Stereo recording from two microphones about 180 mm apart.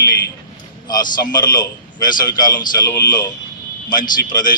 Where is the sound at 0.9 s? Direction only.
20° left (ahead or behind).